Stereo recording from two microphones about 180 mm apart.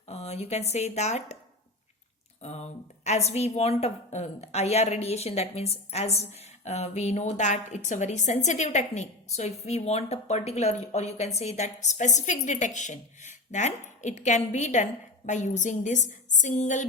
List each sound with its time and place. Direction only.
0.1 s a woman's voice: 35° left (ahead or behind)
2.4 s a woman's voice: 40° left (ahead or behind)